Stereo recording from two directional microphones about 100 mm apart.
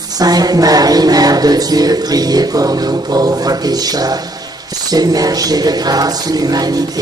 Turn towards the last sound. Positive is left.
turn(degrees=-40)  # may be behind; listen again after turning